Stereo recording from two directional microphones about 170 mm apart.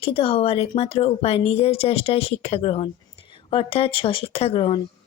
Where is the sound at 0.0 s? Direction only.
35° left (ahead or behind).